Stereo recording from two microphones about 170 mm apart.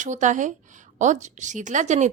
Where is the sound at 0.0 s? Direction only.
45° right (ahead or behind).